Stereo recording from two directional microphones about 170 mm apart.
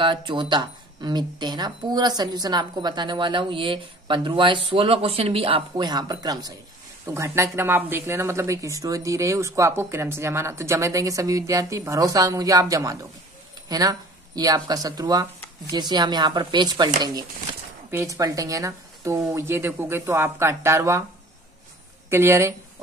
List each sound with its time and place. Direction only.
0.0 s speech: 30° right (ahead or behind)
17.9 s speech: 20° right (ahead or behind)
22.1 s speech: 15° right (ahead or behind)